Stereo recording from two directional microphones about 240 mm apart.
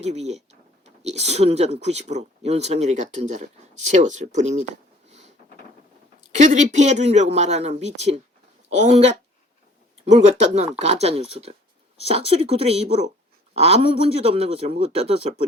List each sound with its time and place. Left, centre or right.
0.0 s speech: right
6.3 s speech: right